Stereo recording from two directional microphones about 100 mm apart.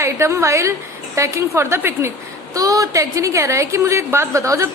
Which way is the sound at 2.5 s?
35° right (ahead or behind).